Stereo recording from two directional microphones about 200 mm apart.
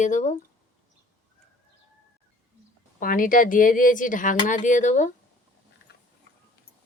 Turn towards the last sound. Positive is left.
turn(degrees=40)  # may be behind; listen again after turning